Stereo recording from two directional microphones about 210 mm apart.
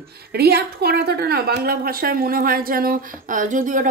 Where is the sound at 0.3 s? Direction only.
50° right (ahead or behind).